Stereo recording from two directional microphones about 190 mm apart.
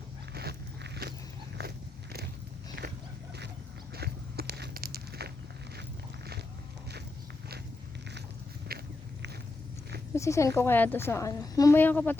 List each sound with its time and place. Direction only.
0.3 s walk: 55° right (ahead or behind)
2.8 s dog: 65° right (ahead or behind)
3.9 s walk: 55° right (ahead or behind)
8.7 s walk: 55° right (ahead or behind)
10.2 s a woman's voice: 15° left (ahead or behind)